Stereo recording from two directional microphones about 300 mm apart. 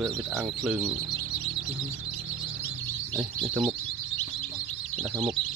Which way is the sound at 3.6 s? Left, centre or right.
Centre.